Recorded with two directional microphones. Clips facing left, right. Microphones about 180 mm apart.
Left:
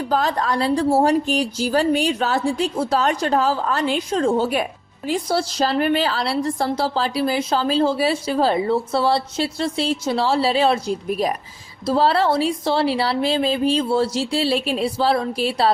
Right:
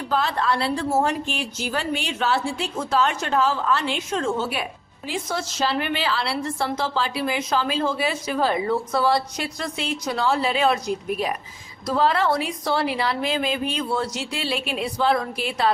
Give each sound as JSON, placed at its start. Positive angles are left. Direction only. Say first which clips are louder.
{"t": 0.1, "sound": "a woman's voice", "louder": "left 1 dB", "side_deg": 40}